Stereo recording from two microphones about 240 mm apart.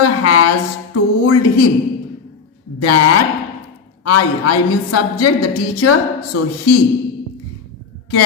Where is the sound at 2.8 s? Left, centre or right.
Left.